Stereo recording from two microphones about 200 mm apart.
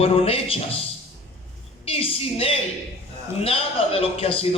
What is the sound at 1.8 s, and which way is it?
A woman's voice, 30° left (ahead or behind).